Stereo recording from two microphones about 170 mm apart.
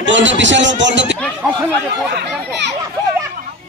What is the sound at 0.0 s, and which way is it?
A man's voice, 90° right.